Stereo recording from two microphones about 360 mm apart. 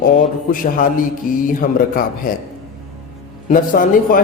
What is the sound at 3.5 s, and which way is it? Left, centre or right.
Speech, left.